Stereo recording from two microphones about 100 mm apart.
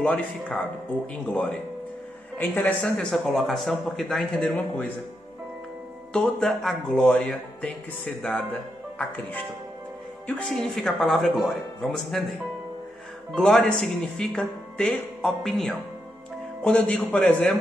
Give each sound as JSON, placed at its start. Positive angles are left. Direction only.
{"t": 0.0, "sound": "speech", "side_deg": 10}
{"t": 6.1, "sound": "a woman's voice", "side_deg": 5}
{"t": 13.3, "sound": "speech", "side_deg": 5}